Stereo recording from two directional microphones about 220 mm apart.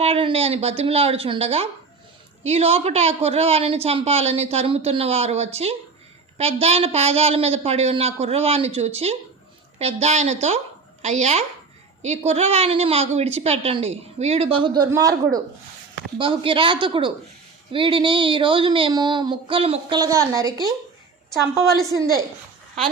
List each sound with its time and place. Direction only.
0.0 s a woman's voice: 25° right (ahead or behind)